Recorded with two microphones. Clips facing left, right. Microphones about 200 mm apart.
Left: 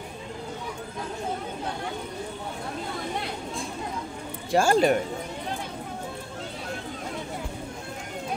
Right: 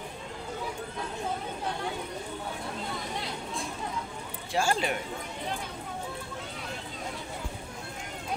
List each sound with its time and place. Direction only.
4.5 s speech: 45° left (ahead or behind)